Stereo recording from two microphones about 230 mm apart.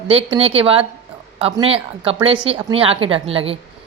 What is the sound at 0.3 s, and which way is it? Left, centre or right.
A woman's voice, right.